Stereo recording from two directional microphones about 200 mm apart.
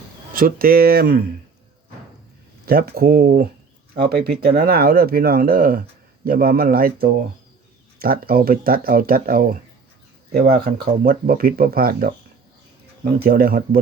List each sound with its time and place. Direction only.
0.3 s speech: 45° right (ahead or behind)
2.6 s speech: 50° right (ahead or behind)